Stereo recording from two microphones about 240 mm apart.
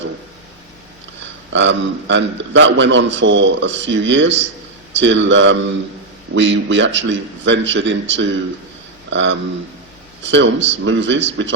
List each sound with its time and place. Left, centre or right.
1.2 s a man's voice: right